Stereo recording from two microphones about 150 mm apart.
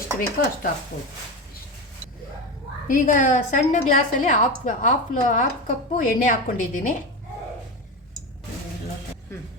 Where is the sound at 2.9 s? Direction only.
60° left (ahead or behind).